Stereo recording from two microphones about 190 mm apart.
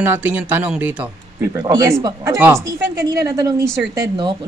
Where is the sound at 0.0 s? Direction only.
10° right (ahead or behind).